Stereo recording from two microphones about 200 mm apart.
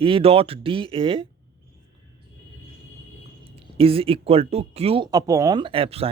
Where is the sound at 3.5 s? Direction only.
30° right (ahead or behind).